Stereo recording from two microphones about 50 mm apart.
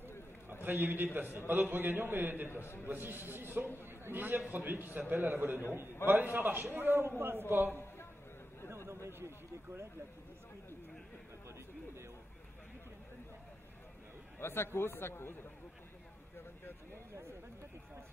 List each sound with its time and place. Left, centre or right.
0.5 s a man's voice: right
2.5 s a man's voice: left
2.9 s a man's voice: right
8.6 s chatter: right
14.4 s speech: left